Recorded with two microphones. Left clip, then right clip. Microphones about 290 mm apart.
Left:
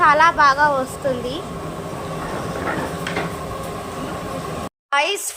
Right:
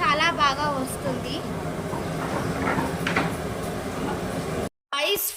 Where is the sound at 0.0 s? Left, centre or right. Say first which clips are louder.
Left 8 dB; centre.